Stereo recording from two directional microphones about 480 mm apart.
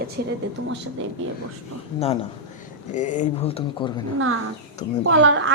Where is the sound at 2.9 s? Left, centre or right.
Centre.